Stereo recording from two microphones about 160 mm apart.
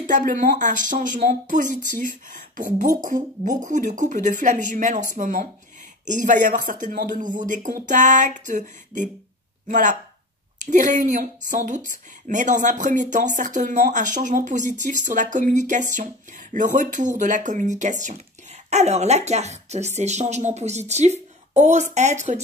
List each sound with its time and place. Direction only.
0.0 s speech: 55° right (ahead or behind)